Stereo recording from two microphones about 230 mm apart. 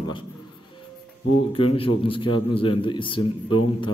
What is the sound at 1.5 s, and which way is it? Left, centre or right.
A man's voice, left.